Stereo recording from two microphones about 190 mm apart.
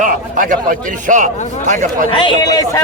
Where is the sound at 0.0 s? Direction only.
45° right (ahead or behind).